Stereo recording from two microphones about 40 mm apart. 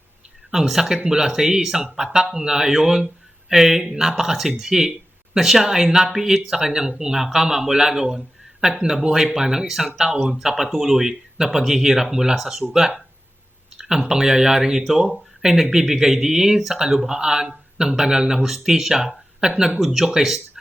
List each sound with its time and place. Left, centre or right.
0.5 s speech: centre
19.8 s speech: centre